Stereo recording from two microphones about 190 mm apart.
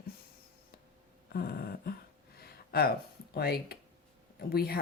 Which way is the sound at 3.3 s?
55° left (ahead or behind).